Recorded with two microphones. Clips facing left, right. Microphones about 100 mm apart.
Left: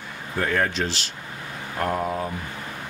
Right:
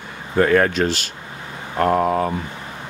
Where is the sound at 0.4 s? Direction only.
75° right (ahead or behind).